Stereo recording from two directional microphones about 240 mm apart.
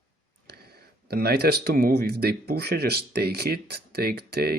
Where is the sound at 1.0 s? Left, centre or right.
Right.